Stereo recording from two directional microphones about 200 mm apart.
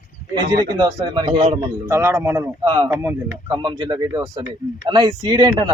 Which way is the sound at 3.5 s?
20° right (ahead or behind).